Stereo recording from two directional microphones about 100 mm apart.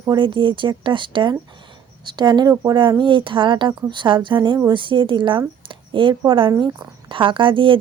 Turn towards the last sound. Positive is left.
turn(degrees=-60)  # may be behind; listen again after turning